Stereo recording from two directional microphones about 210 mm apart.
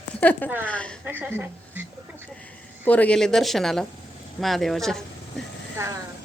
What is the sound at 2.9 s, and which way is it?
Speech, 5° left (ahead or behind).